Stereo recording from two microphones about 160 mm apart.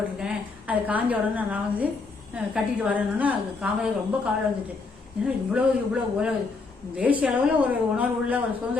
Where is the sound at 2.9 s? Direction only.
10° right (ahead or behind).